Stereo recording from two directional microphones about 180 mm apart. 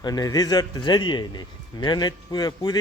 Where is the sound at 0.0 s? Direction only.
20° left (ahead or behind).